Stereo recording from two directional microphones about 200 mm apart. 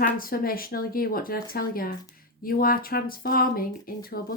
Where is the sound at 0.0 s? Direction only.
45° left (ahead or behind).